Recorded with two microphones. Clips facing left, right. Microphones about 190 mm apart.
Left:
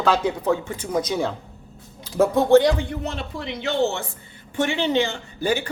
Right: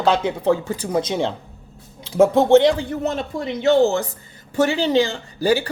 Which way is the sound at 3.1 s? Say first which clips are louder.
Right 6 dB; 45° right (ahead or behind).